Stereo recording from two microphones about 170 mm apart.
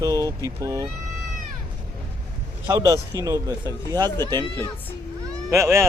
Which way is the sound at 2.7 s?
15° right (ahead or behind).